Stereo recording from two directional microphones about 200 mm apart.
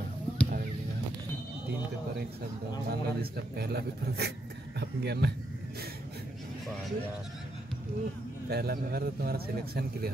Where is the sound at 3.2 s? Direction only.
50° right (ahead or behind).